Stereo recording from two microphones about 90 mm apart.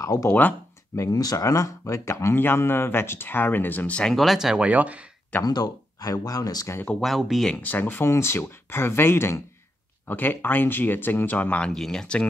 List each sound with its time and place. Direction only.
0.0 s speech: 40° left (ahead or behind)
0.3 s speech: 20° left (ahead or behind)
0.9 s speech: 40° left (ahead or behind); by 4.1 s 15° left (ahead or behind)
4.1 s speech: centre (ahead or behind)
5.4 s speech: 45° left (ahead or behind)
6.9 s speech: centre (ahead or behind)
7.4 s speech: 15° left (ahead or behind)